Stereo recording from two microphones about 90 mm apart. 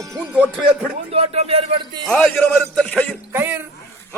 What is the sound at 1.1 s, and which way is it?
Speech, 90° right.